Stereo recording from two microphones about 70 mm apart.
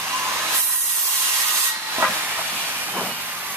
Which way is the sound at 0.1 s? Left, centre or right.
Right.